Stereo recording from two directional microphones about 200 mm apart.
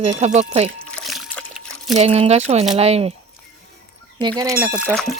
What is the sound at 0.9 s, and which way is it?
Splash, centre (ahead or behind).